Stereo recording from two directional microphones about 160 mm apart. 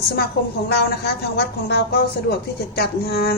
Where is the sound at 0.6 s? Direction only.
90° left.